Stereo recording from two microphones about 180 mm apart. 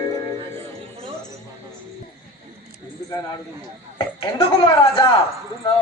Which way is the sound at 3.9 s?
20° left (ahead or behind).